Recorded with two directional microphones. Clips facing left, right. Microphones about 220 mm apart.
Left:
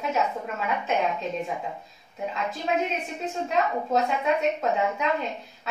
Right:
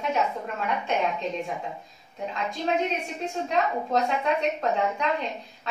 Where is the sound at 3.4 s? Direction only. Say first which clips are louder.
Left 1 dB; 5° left (ahead or behind).